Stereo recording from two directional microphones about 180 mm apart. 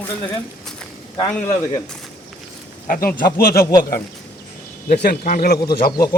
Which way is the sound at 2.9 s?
55° left (ahead or behind).